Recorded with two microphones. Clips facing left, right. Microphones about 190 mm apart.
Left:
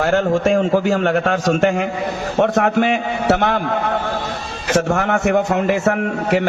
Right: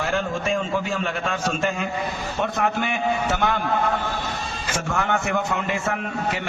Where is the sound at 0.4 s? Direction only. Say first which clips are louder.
Left 9 dB; 80° left.